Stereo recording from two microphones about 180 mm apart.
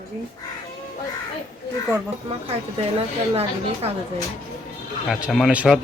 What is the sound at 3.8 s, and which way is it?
Speech, 35° right (ahead or behind).